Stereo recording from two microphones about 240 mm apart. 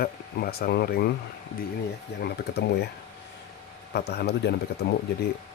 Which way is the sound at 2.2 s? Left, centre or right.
Left.